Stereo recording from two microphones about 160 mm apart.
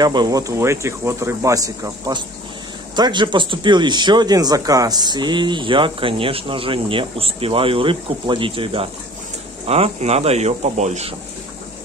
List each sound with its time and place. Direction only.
0.0 s speech: 25° right (ahead or behind); by 11.1 s 45° right (ahead or behind)